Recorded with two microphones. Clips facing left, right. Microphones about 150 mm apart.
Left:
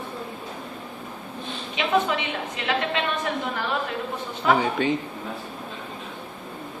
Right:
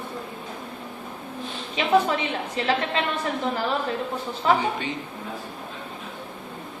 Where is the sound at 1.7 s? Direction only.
35° right (ahead or behind).